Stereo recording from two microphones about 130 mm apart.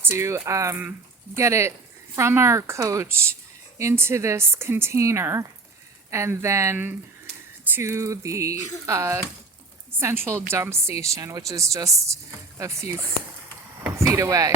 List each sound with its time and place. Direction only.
0.0 s speech: 20° right (ahead or behind)
10.5 s speech: 20° right (ahead or behind)
14.0 s speech: 25° right (ahead or behind)